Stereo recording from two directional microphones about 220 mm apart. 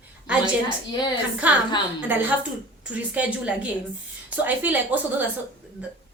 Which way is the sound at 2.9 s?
5° right (ahead or behind).